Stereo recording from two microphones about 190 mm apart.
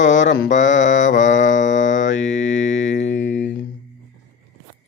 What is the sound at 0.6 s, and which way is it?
Music, 75° left (ahead or behind).